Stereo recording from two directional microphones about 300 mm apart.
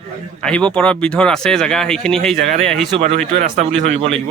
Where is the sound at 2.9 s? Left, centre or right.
Centre.